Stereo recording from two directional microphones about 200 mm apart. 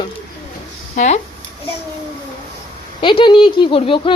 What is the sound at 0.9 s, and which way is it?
Speech, 35° left (ahead or behind).